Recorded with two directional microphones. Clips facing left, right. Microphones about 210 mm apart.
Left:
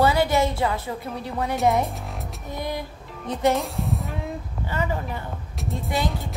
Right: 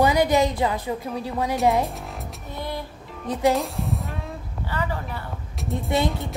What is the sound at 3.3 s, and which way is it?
Speech, 10° right (ahead or behind).